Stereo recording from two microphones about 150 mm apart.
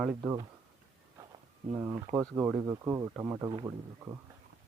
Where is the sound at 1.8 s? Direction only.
20° right (ahead or behind).